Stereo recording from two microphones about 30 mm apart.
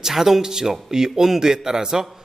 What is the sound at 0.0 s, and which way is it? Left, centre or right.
A man's voice, centre.